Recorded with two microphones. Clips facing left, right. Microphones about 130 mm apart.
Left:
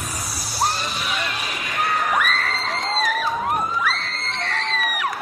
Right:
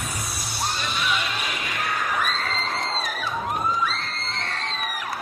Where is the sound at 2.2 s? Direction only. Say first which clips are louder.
Left 3 dB; 70° left (ahead or behind).